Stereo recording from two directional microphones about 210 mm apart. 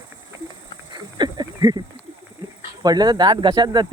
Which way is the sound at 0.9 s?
20° right (ahead or behind).